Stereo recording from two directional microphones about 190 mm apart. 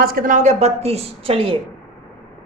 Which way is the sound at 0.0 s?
50° right (ahead or behind).